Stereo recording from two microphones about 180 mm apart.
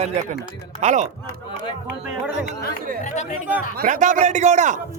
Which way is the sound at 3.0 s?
40° left (ahead or behind).